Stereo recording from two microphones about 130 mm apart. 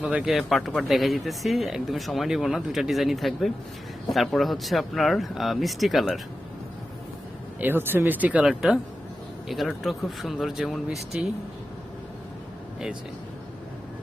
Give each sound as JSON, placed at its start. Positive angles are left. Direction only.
{"t": 0.0, "sound": "speech", "side_deg": -10}
{"t": 7.6, "sound": "speech", "side_deg": -15}